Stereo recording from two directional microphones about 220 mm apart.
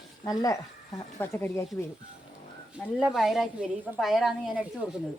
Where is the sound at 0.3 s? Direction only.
15° left (ahead or behind).